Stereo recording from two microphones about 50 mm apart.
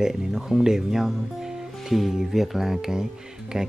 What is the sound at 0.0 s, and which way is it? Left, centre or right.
Speech, centre.